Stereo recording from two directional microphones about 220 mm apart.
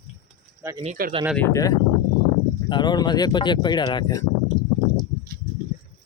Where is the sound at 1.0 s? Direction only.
40° right (ahead or behind).